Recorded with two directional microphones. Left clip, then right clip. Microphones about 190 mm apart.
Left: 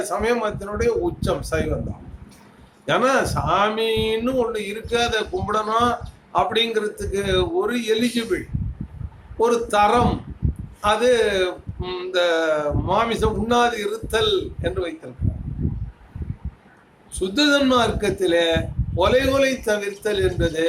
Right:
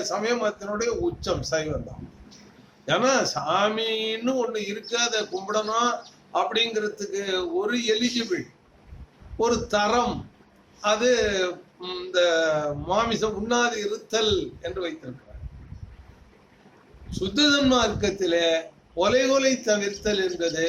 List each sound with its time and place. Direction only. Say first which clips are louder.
0.1 s speech: left 3 dB; 5° left (ahead or behind)
2.8 s speech: left 3 dB; 5° left (ahead or behind)
9.4 s speech: left 5 dB; 5° left (ahead or behind)
17.2 s speech: left 3 dB; 5° left (ahead or behind)